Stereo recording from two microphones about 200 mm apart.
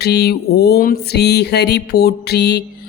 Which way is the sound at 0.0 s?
55° left (ahead or behind).